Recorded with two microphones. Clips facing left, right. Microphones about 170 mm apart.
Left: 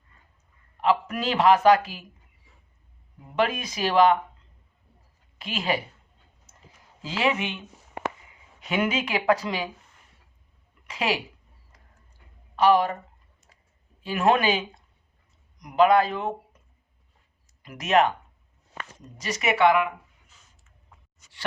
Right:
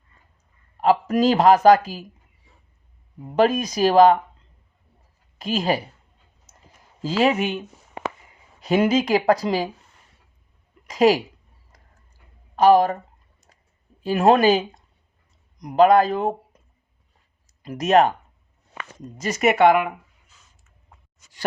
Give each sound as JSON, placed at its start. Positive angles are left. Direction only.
{"t": 0.8, "sound": "a man's voice", "side_deg": -40}
{"t": 3.3, "sound": "a man's voice", "side_deg": -40}
{"t": 5.4, "sound": "speech", "side_deg": -40}
{"t": 7.2, "sound": "a man's voice", "side_deg": -40}
{"t": 8.6, "sound": "a man's voice", "side_deg": -35}
{"t": 10.8, "sound": "speech", "side_deg": -40}
{"t": 12.5, "sound": "speech", "side_deg": -40}
{"t": 14.0, "sound": "a man's voice", "side_deg": -40}
{"t": 17.6, "sound": "a man's voice", "side_deg": -40}
{"t": 19.1, "sound": "speech", "side_deg": -45}